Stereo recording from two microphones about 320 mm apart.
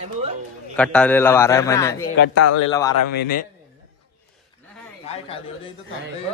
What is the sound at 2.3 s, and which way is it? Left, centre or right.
Speech, left.